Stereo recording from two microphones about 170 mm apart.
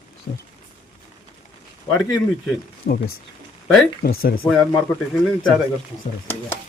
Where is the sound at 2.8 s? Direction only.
45° left (ahead or behind).